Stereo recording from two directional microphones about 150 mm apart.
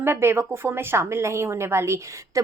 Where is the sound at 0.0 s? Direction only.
15° right (ahead or behind).